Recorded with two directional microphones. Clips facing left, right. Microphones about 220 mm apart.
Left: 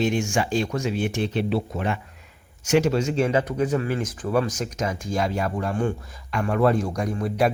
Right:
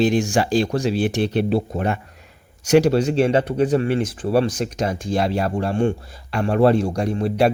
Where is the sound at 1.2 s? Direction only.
65° right (ahead or behind).